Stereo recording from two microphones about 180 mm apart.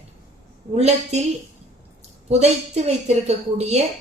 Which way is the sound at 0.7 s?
35° right (ahead or behind).